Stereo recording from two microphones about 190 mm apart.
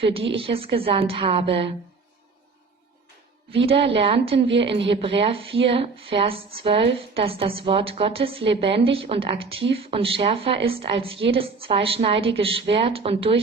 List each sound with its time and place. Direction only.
0.0 s speech: 30° right (ahead or behind)
3.5 s speech: 30° right (ahead or behind)
4.4 s a woman's voice: 65° right (ahead or behind)
4.6 s speech: 30° right (ahead or behind)